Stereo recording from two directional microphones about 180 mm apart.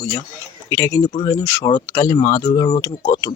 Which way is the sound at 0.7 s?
20° left (ahead or behind).